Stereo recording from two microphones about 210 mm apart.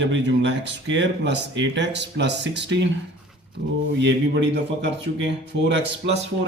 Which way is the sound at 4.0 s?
55° right (ahead or behind).